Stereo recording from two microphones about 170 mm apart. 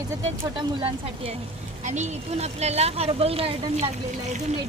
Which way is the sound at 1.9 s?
40° right (ahead or behind).